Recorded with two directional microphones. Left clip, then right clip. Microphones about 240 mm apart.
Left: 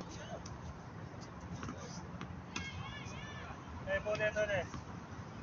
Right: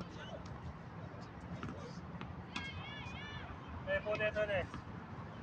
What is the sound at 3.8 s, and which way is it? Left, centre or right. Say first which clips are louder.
Speech: left 1 dB; right.